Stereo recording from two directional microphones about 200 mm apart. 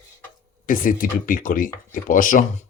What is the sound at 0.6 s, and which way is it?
Speech, 45° left (ahead or behind).